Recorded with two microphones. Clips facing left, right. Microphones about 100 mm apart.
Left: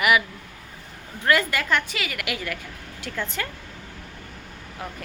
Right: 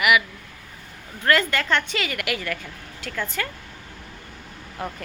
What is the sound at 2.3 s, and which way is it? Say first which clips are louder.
A woman's voice: right 2 dB; 15° left (ahead or behind).